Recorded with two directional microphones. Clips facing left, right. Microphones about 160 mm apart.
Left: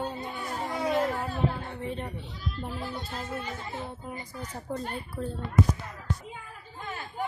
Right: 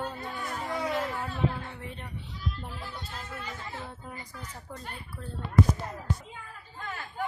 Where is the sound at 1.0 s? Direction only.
35° left (ahead or behind).